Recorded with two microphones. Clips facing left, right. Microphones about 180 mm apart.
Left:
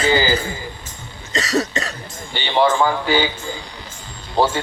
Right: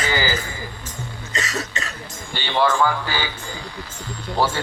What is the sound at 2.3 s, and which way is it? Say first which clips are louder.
A man's voice: left 3 dB; 20° left (ahead or behind).